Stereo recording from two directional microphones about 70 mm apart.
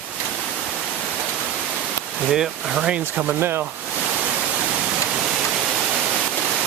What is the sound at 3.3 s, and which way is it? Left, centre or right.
Speech, right.